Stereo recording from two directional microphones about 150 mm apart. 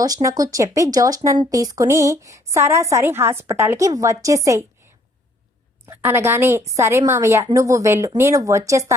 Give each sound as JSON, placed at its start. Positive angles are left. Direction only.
{"t": 0.0, "sound": "speech", "side_deg": -25}
{"t": 5.9, "sound": "speech", "side_deg": -15}